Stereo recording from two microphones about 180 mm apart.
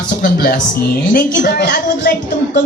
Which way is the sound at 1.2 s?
65° left (ahead or behind).